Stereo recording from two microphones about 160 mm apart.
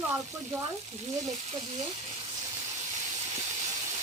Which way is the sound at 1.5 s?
40° right (ahead or behind).